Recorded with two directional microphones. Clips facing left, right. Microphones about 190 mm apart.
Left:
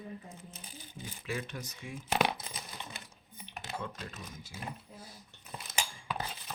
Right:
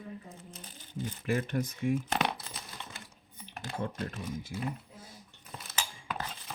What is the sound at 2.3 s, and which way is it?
Crumpling, 20° left (ahead or behind).